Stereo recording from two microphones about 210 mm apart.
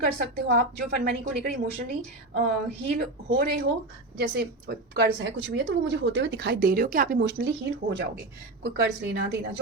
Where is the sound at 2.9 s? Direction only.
45° right (ahead or behind).